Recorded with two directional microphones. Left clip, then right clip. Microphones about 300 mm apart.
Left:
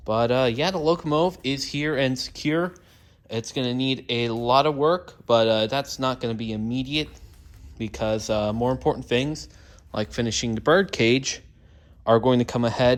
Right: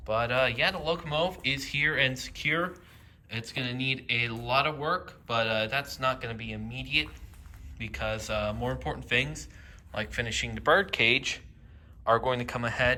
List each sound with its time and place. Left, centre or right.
0.1 s speech: centre
12.0 s speech: left